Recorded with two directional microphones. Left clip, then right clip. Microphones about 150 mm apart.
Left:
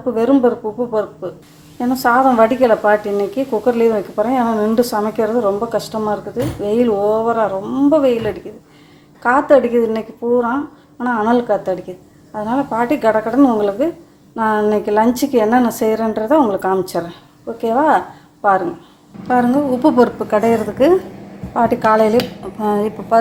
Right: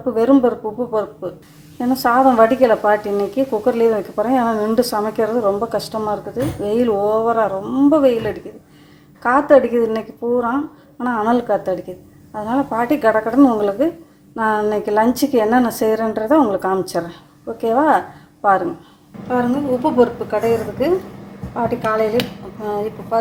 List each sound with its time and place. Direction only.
0.1 s speech: 5° right (ahead or behind)
19.3 s a woman's voice: 50° left (ahead or behind)
22.6 s a woman's voice: 45° left (ahead or behind)